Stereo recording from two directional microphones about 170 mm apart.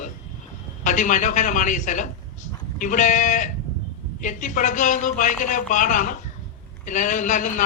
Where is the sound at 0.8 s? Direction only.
50° left (ahead or behind).